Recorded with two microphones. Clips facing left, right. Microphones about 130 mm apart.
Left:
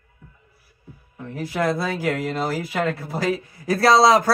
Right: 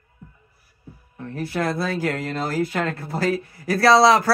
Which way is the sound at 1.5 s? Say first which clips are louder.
Left 1 dB; 15° left (ahead or behind).